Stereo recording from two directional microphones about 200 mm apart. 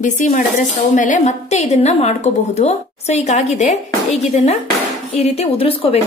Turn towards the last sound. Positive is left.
turn(degrees=30)  # may be behind; listen again after turning